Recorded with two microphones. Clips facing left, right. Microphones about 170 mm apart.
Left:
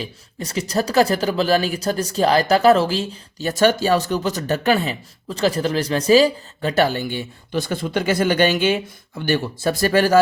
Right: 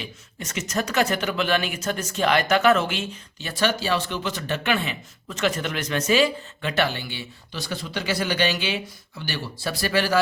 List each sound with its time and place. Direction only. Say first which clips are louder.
0.0 s speech: left 6 dB; 35° left (ahead or behind)